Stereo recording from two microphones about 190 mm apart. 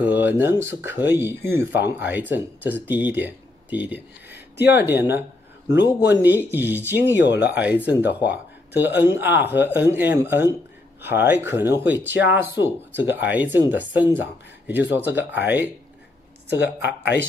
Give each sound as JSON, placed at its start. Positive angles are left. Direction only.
{"t": 0.0, "sound": "speech", "side_deg": -10}
{"t": 16.4, "sound": "speech", "side_deg": 65}